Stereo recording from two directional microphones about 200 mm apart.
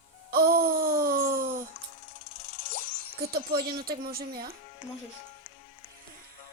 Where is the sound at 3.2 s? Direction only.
50° right (ahead or behind).